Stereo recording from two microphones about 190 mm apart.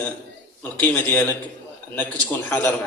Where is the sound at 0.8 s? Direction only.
10° left (ahead or behind).